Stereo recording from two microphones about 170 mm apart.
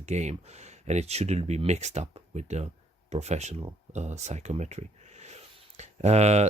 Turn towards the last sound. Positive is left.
turn(degrees=-40)  # may be behind; listen again after turning